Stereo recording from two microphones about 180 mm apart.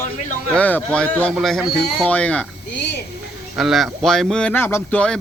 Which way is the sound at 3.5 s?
Centre (ahead or behind).